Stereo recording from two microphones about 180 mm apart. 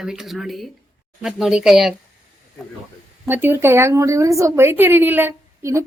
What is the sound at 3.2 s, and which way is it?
A woman's voice, 10° right (ahead or behind).